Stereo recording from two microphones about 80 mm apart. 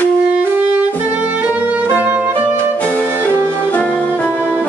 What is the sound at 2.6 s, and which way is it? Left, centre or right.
Music, centre.